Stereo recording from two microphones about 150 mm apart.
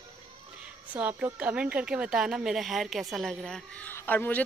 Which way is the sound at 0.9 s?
10° right (ahead or behind).